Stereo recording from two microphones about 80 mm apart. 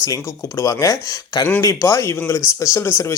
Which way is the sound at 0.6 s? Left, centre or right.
Left.